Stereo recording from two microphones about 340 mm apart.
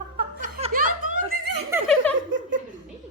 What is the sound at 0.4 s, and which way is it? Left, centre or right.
Chuckle, right.